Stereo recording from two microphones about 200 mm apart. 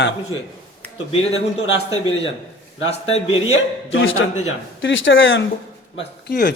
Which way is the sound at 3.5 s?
75° left (ahead or behind).